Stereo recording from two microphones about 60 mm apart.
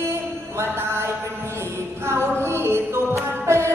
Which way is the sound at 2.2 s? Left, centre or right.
Right.